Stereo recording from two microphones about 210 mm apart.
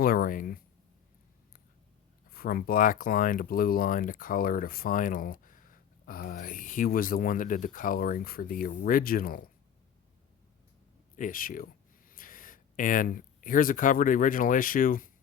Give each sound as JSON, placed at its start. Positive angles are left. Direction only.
{"t": 0.0, "sound": "a sound", "side_deg": 45}
{"t": 2.3, "sound": "speech", "side_deg": 45}
{"t": 11.2, "sound": "speech", "side_deg": 40}